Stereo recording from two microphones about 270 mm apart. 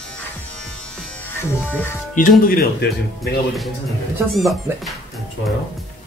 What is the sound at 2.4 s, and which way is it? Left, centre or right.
Speech, left.